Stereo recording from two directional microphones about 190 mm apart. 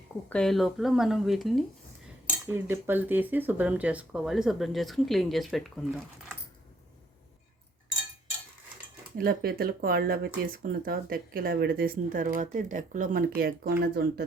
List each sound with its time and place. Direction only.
0.3 s speech: 5° left (ahead or behind)
2.5 s speech: 10° right (ahead or behind)
9.1 s speech: 55° right (ahead or behind)